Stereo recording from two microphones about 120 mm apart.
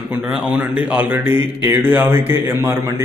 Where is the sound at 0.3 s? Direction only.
10° right (ahead or behind).